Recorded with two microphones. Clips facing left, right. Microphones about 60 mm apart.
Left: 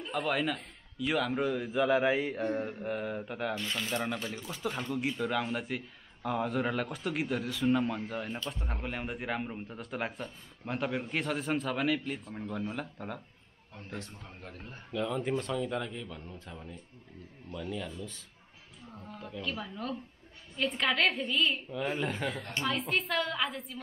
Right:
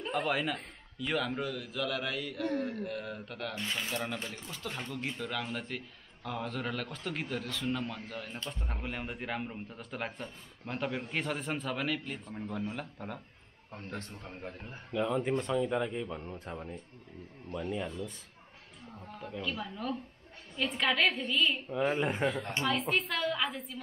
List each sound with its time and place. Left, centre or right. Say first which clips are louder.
0.1 s a man's voice: left 1 dB; centre
1.4 s a man's voice: left 6 dB; left
3.5 s speech: left 1 dB; centre
3.9 s speech: left 3 dB; centre
8.5 s a man's voice: left 2 dB; centre
14.6 s speech: right 1 dB; centre; by 16.8 s right
17.6 s speech: right 2 dB; centre
18.9 s a man's voice: right 1 dB; centre
22.0 s speech: right 3 dB; centre
22.6 s a man's voice: even; centre